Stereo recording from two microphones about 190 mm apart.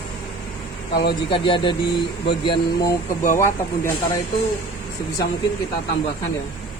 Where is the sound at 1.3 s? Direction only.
25° left (ahead or behind).